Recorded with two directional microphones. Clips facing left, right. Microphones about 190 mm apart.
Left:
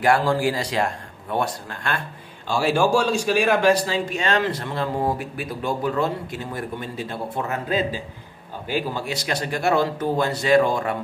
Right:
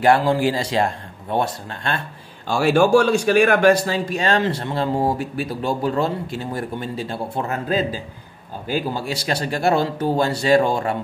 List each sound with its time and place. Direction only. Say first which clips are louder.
0.0 s a man's voice: right 3 dB; 25° right (ahead or behind)
2.4 s a man's voice: right 4 dB; 50° right (ahead or behind); by 11.0 s 30° right (ahead or behind)